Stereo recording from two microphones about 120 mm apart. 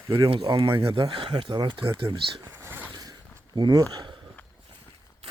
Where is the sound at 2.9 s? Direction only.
35° right (ahead or behind).